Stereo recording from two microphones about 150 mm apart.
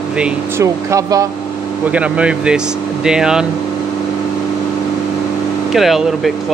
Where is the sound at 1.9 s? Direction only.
10° right (ahead or behind).